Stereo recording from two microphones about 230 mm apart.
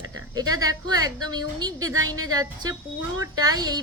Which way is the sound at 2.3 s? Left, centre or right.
Centre.